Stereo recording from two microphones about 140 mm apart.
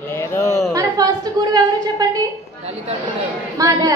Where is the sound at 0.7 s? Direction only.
25° right (ahead or behind).